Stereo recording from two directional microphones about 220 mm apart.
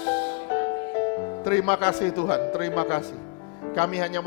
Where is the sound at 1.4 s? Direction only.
15° left (ahead or behind).